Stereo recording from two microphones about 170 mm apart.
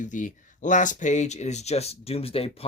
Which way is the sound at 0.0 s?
50° left (ahead or behind).